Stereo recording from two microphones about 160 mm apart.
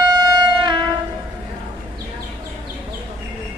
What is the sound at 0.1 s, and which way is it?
Train, 30° right (ahead or behind).